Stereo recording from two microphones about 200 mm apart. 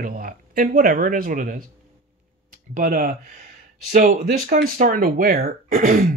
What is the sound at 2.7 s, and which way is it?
Speech, 45° right (ahead or behind).